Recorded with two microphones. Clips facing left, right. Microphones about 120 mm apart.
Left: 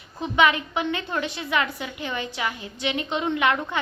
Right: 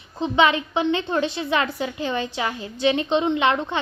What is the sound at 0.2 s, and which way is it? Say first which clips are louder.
A woman's voice: right 2 dB; 30° right (ahead or behind).